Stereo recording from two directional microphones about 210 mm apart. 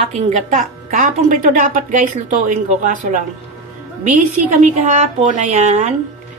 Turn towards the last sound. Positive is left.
turn(degrees=-35)  # may be behind; listen again after turning